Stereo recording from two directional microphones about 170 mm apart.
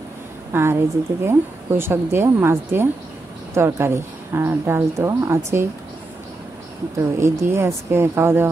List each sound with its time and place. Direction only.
0.5 s a woman's voice: 15° right (ahead or behind)
7.0 s speech: 15° right (ahead or behind)